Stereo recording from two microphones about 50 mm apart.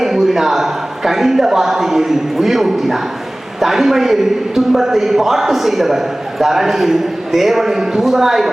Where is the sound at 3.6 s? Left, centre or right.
Centre.